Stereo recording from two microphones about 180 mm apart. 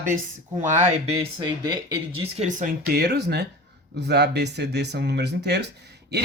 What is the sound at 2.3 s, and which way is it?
Speech, 40° right (ahead or behind).